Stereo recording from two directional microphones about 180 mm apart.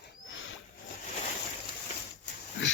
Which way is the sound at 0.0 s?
90° left.